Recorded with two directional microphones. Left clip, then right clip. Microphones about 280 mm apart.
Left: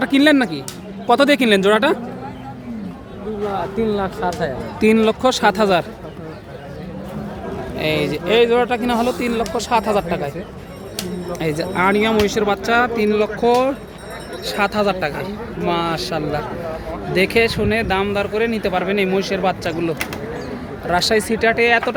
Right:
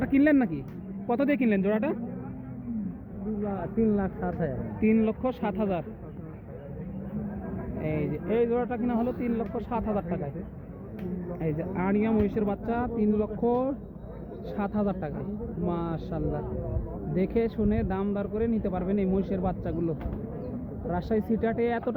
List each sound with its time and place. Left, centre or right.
0.0 s speech: centre
3.8 s speech: centre
4.8 s speech: left
7.8 s speech: centre
11.7 s speech: centre
20.9 s speech: centre